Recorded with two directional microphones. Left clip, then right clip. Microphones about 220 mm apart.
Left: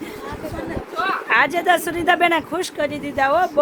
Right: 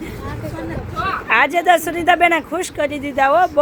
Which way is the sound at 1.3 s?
10° right (ahead or behind).